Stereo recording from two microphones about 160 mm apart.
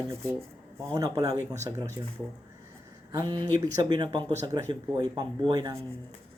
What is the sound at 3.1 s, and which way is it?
Speech, 25° right (ahead or behind).